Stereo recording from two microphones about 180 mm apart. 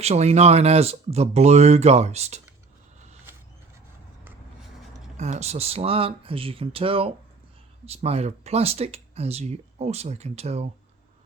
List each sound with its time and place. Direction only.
0.0 s speech: 35° right (ahead or behind)
5.1 s speech: 40° right (ahead or behind)